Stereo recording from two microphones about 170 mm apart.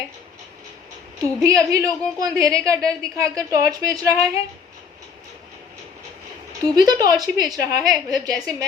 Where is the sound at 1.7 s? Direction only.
20° right (ahead or behind).